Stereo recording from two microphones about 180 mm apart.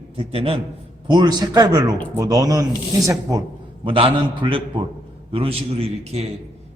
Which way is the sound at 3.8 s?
30° right (ahead or behind).